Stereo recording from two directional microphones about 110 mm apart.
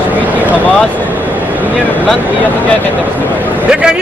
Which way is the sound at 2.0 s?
15° left (ahead or behind).